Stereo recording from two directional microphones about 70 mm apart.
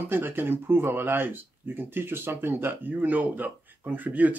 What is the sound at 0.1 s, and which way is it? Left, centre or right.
Speech, right.